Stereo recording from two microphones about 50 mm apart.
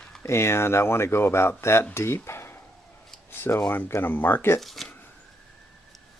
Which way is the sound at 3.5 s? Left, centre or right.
Left.